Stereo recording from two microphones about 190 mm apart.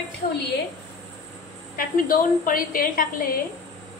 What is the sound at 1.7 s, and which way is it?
A woman's voice, 45° left (ahead or behind).